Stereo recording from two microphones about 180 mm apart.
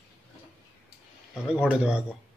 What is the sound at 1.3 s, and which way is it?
Speech, 5° right (ahead or behind).